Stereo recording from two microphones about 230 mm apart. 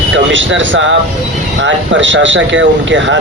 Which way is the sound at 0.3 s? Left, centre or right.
Right.